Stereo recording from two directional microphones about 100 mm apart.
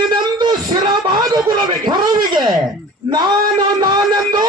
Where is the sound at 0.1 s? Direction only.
50° right (ahead or behind).